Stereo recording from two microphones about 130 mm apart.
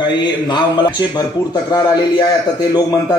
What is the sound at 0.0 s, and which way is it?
A man's voice, 35° left (ahead or behind).